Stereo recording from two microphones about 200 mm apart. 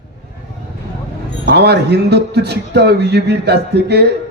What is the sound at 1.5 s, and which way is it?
A man's voice, 55° right (ahead or behind).